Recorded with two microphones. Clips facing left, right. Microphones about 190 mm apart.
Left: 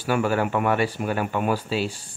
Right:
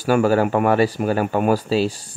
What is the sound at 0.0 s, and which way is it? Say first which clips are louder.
Speech: right 6 dB; 40° right (ahead or behind).